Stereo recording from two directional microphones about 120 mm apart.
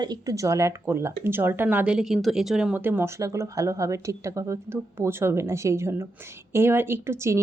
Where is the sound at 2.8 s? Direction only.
20° right (ahead or behind).